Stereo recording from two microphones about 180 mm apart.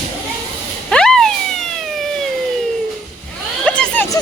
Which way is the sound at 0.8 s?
5° left (ahead or behind).